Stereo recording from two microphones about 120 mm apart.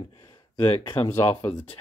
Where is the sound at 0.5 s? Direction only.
40° left (ahead or behind).